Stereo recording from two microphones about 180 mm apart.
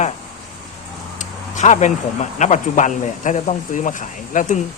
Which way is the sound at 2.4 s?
40° left (ahead or behind).